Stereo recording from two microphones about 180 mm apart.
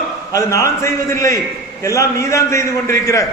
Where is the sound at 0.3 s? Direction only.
20° left (ahead or behind).